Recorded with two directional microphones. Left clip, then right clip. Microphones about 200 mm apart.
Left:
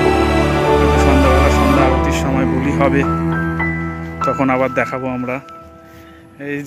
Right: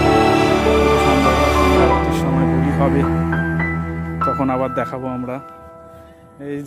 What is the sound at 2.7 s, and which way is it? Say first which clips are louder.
Speech: left 5 dB; 5° right (ahead or behind).